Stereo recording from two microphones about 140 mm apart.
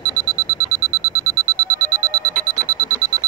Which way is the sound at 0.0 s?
25° right (ahead or behind).